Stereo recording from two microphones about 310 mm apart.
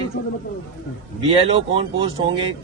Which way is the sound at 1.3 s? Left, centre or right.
Centre.